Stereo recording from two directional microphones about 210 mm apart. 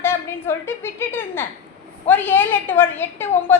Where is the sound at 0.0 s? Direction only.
10° left (ahead or behind).